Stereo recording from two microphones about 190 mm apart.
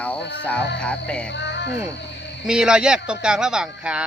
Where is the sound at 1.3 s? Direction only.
65° left (ahead or behind).